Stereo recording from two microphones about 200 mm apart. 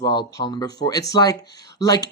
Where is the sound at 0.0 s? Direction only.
20° left (ahead or behind).